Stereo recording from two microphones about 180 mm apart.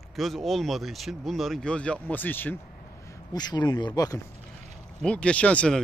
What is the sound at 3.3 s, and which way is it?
Speech, 20° left (ahead or behind).